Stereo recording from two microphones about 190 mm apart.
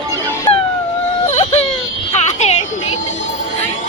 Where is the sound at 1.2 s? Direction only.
35° left (ahead or behind).